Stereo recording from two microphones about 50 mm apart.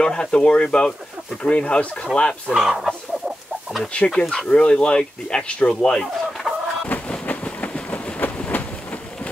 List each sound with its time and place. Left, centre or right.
0.0 s speech: centre
2.5 s speech: centre
4.1 s speech: centre
4.5 s speech: left
5.8 s fowl: centre
7.1 s train: left
8.2 s train: left